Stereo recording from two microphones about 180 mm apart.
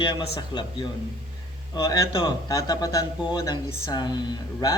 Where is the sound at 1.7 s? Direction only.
25° left (ahead or behind).